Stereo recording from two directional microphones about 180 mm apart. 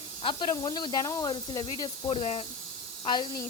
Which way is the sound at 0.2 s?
25° left (ahead or behind).